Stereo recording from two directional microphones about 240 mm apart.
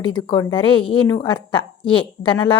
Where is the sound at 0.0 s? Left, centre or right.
Centre.